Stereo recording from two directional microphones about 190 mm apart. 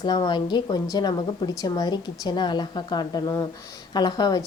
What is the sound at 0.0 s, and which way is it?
Speech, 20° left (ahead or behind).